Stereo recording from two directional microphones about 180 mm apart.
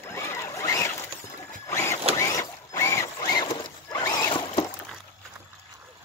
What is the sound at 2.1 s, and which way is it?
Mechanisms, 20° left (ahead or behind).